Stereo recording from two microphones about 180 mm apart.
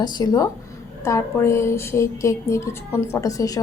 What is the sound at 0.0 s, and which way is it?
A woman's voice, 20° left (ahead or behind).